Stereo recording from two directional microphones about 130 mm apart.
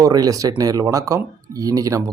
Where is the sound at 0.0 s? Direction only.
30° right (ahead or behind).